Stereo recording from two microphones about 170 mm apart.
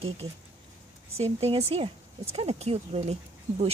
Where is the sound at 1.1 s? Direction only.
35° right (ahead or behind).